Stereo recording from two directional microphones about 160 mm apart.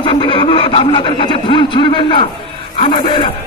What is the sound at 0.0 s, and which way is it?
Speech, 30° left (ahead or behind).